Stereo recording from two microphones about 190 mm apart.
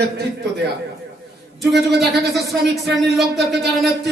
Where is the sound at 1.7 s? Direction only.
60° right (ahead or behind).